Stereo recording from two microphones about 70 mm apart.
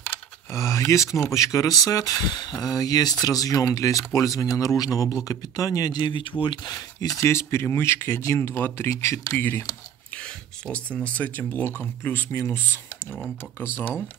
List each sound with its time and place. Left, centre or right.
0.5 s speech: left
7.2 s speech: left
8.9 s speech: left
10.7 s speech: centre; by 12.8 s left